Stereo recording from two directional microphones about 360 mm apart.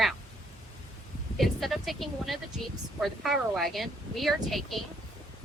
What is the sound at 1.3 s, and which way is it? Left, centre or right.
Speech, centre.